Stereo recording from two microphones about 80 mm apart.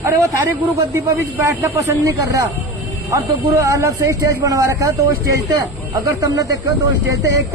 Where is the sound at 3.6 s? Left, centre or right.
Right.